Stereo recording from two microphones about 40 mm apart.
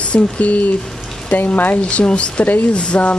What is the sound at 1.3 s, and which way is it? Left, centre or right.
Speech, left.